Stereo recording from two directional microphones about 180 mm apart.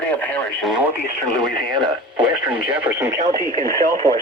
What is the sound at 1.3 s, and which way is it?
Speech, 25° right (ahead or behind).